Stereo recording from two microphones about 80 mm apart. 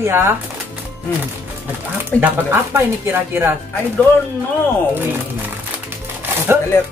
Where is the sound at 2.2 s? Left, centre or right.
Right.